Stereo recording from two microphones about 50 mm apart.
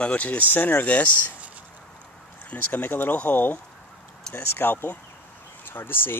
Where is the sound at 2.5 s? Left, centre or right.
Left.